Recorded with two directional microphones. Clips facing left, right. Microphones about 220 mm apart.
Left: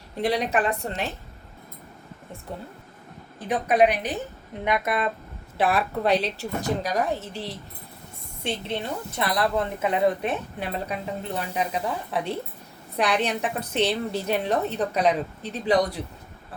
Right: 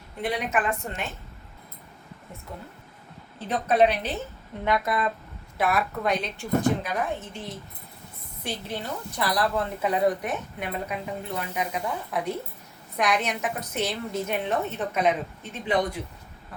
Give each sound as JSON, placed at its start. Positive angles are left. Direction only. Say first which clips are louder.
{"t": 0.2, "sound": "a woman's voice", "louder": "left 4 dB", "side_deg": 35}
{"t": 3.3, "sound": "a woman's voice", "louder": "left 1 dB", "side_deg": 15}
{"t": 8.4, "sound": "a woman's voice", "louder": "left 3 dB", "side_deg": 25}